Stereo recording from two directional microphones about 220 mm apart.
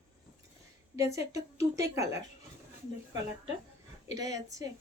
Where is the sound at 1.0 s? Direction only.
15° right (ahead or behind).